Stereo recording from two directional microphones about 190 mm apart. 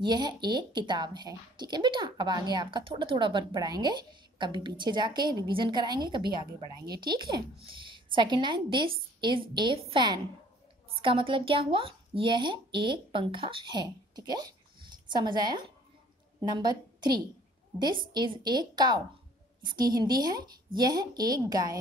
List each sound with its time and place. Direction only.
0.0 s a woman's voice: 20° right (ahead or behind)